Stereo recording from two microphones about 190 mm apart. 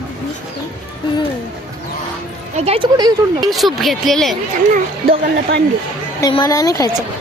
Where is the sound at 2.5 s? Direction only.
30° right (ahead or behind).